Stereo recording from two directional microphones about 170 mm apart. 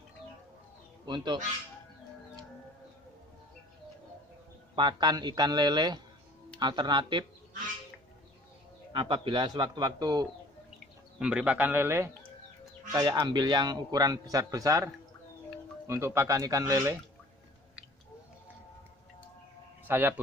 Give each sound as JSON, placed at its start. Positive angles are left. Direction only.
{"t": 1.0, "sound": "speech", "side_deg": -25}
{"t": 4.7, "sound": "a man's voice", "side_deg": -25}
{"t": 8.9, "sound": "a man's voice", "side_deg": -30}
{"t": 11.1, "sound": "a man's voice", "side_deg": -5}
{"t": 12.9, "sound": "a man's voice", "side_deg": -25}
{"t": 15.9, "sound": "a man's voice", "side_deg": -15}
{"t": 19.9, "sound": "a man's voice", "side_deg": -10}